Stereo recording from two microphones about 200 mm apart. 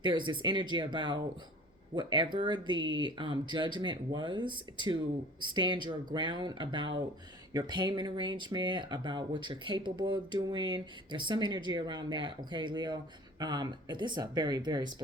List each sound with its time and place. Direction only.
0.0 s speech: 25° right (ahead or behind)